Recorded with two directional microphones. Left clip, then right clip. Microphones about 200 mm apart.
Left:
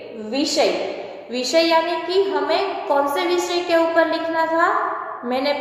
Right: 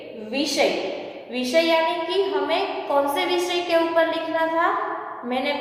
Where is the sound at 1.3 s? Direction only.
25° left (ahead or behind).